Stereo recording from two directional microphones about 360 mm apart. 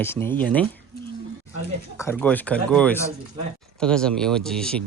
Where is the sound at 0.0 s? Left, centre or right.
Centre.